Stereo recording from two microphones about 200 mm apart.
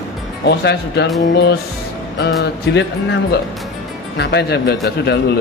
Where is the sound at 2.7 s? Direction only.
60° left (ahead or behind).